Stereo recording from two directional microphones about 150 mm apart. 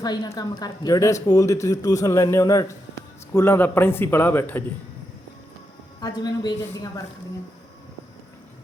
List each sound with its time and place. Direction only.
0.0 s a man's voice: 25° left (ahead or behind)
6.0 s speech: 25° left (ahead or behind)